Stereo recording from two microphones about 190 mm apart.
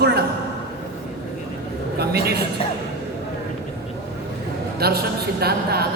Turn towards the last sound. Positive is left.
turn(degrees=-55)  # may be behind; listen again after turning